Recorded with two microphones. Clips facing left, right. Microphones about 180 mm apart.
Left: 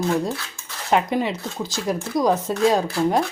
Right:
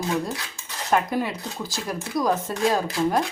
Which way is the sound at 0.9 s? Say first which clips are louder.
Left 3 dB; 20° left (ahead or behind).